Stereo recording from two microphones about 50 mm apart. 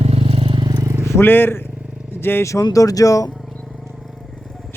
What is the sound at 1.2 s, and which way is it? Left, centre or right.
Speech, left.